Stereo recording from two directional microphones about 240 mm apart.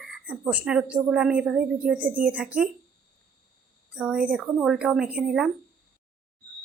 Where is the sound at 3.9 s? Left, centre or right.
Centre.